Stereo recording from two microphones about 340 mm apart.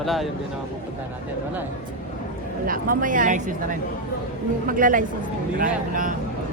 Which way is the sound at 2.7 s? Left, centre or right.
Right.